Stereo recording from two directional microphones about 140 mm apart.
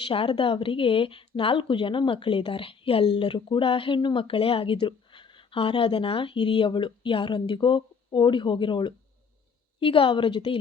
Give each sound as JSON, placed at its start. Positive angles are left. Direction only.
{"t": 0.0, "sound": "a woman's voice", "side_deg": 40}